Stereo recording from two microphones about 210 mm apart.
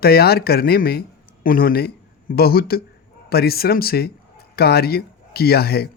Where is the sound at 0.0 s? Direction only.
50° left (ahead or behind).